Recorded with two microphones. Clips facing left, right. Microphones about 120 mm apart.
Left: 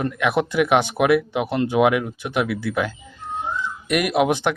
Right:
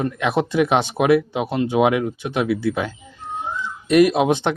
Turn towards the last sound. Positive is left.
turn(degrees=-25)  # may be behind; listen again after turning